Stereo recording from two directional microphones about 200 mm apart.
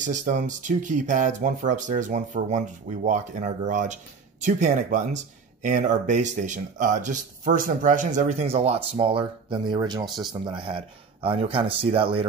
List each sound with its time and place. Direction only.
0.0 s speech: 40° right (ahead or behind)